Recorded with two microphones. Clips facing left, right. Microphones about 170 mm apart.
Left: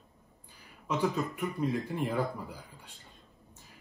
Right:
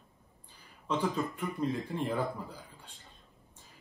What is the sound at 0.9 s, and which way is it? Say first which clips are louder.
Speech: left 1 dB; 10° left (ahead or behind).